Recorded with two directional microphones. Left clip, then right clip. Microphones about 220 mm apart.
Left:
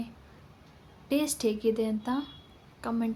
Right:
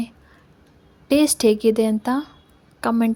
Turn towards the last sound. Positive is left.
turn(degrees=-40)  # may be behind; listen again after turning